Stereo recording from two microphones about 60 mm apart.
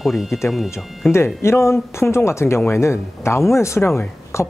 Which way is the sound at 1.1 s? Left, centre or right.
Left.